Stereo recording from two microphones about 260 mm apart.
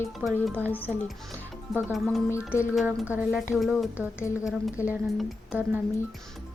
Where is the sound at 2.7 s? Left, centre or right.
Centre.